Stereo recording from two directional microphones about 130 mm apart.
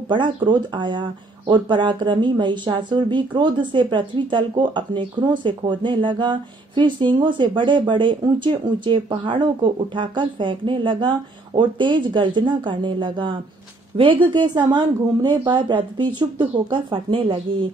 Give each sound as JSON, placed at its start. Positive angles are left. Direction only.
{"t": 0.1, "sound": "speech", "side_deg": -35}